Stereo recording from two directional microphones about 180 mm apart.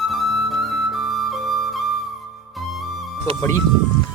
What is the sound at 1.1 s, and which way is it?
Flute, centre (ahead or behind).